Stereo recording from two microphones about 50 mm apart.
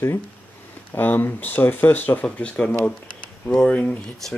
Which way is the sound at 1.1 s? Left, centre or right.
Left.